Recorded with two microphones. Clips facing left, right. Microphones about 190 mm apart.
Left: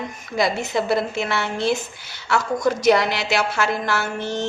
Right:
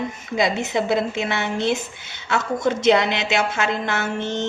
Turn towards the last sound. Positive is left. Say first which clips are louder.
# even
turn(degrees=-20)  # may be behind; listen again after turning